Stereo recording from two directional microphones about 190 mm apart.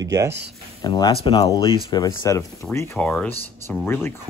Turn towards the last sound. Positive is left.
turn(degrees=10)  # may be behind; listen again after turning